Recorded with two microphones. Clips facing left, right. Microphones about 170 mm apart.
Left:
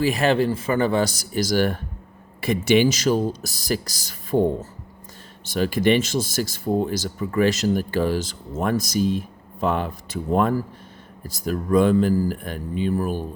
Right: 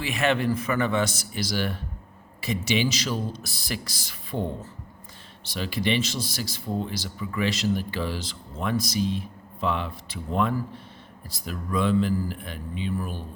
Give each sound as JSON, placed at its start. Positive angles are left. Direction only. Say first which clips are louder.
{"t": 0.0, "sound": "speech", "louder": "left 5 dB", "side_deg": 35}